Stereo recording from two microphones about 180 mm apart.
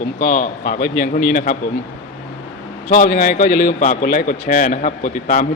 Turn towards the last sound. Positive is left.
turn(degrees=45)  # may be behind; listen again after turning